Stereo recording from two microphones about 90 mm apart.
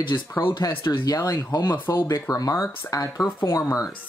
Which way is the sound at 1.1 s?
35° left (ahead or behind).